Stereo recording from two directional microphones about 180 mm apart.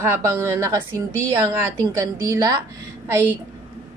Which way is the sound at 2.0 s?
20° right (ahead or behind).